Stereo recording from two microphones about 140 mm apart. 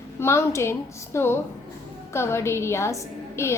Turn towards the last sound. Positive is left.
turn(degrees=20)  # may be behind; listen again after turning